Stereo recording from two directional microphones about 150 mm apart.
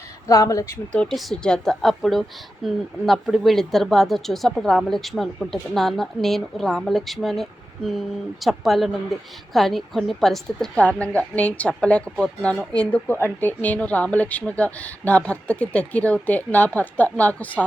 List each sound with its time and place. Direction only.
0.3 s speech: 20° left (ahead or behind)
1.0 s speech: centre (ahead or behind)